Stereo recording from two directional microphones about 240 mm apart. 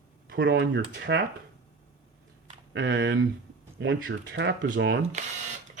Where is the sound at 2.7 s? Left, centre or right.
Right.